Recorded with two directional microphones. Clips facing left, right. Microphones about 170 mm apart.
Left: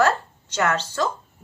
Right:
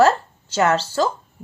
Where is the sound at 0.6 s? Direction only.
35° right (ahead or behind).